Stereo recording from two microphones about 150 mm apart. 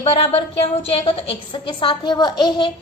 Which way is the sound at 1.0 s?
40° left (ahead or behind).